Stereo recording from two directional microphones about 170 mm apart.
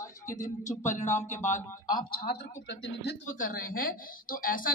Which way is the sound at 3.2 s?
50° left (ahead or behind).